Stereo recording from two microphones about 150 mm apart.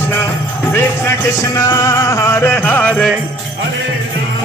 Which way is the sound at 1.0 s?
20° left (ahead or behind).